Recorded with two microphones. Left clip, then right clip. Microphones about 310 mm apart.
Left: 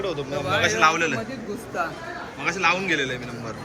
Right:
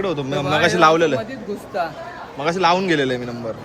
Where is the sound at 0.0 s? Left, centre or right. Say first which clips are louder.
Right 5 dB; right.